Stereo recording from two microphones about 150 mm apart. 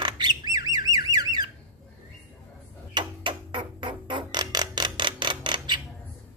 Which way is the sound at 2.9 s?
30° right (ahead or behind).